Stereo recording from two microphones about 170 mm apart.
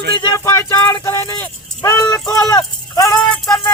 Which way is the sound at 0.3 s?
20° left (ahead or behind).